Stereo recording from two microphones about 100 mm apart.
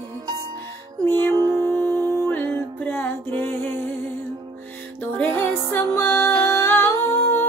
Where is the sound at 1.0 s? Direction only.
20° left (ahead or behind).